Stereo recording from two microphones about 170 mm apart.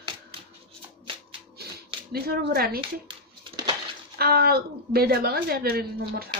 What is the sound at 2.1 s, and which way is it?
Speech, 65° right (ahead or behind).